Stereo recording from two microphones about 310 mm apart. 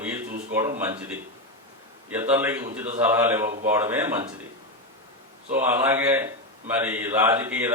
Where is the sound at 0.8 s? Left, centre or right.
Centre.